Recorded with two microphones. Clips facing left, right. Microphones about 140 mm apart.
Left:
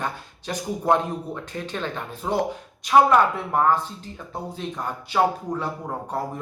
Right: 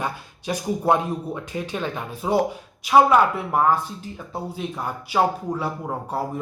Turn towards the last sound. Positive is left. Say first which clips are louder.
# right 1 dB
turn(degrees=-5)  # may be behind; listen again after turning